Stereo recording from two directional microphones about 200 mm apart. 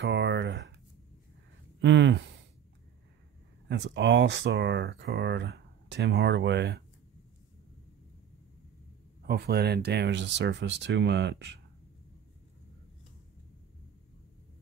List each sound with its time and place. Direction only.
0.0 s a sound: 60° right (ahead or behind)
1.8 s speech: 65° right (ahead or behind)
3.6 s speech: 60° right (ahead or behind)
9.2 s speech: 50° right (ahead or behind)